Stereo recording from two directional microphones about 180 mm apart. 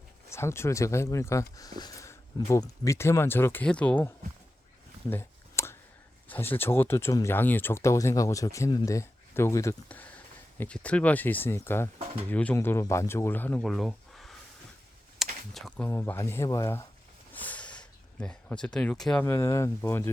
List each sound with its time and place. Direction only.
0.3 s speech: 15° left (ahead or behind)
5.0 s a sound: 15° left (ahead or behind)
6.2 s speech: 10° left (ahead or behind)
15.9 s speech: 15° left (ahead or behind)
17.3 s a sound: 10° left (ahead or behind)
19.2 s speech: 15° left (ahead or behind)